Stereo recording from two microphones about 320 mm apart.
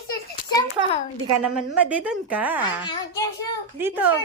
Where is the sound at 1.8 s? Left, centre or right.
Centre.